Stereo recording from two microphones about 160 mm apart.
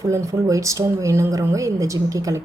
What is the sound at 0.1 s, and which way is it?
Speech, 20° right (ahead or behind).